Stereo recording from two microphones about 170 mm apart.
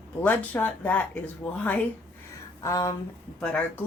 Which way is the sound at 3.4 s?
5° left (ahead or behind).